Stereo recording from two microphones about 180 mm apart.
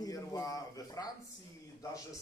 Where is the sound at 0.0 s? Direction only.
20° left (ahead or behind).